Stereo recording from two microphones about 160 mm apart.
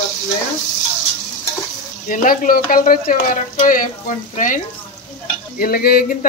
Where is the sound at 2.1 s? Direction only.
60° left (ahead or behind).